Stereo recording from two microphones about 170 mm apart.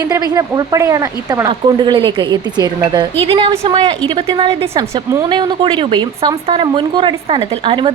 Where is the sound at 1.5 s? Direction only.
30° right (ahead or behind).